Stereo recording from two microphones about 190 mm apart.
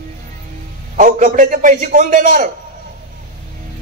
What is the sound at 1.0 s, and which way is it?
A man's voice, 45° right (ahead or behind).